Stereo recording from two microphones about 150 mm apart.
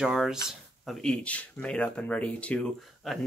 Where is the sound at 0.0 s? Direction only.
5° right (ahead or behind).